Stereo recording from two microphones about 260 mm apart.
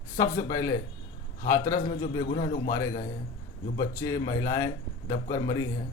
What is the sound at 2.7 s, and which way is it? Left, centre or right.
Speech, centre.